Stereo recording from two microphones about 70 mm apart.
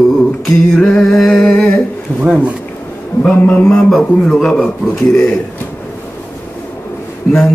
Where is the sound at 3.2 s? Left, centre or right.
Centre.